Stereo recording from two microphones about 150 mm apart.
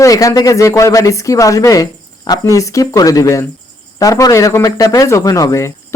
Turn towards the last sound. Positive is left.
turn(degrees=20)  # may be behind; listen again after turning